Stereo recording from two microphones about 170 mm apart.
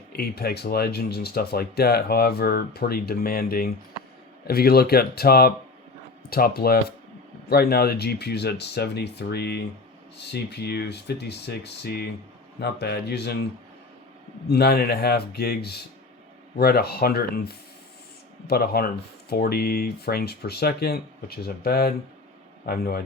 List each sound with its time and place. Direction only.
0.2 s speech: 70° left (ahead or behind)
14.5 s speech: 70° left (ahead or behind)